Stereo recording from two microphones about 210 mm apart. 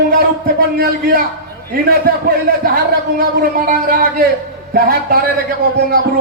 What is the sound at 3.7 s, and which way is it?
A man's voice, 45° right (ahead or behind).